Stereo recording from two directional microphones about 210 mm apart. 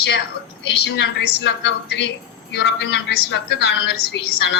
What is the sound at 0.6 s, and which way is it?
Speech, 60° left (ahead or behind).